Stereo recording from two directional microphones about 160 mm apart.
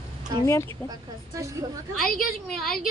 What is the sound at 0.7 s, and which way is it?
A woman's voice, 20° right (ahead or behind).